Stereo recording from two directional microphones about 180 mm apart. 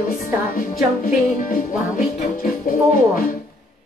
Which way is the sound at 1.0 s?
45° left (ahead or behind).